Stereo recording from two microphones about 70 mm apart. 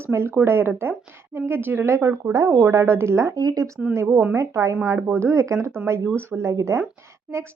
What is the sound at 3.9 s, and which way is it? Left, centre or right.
Speech, right.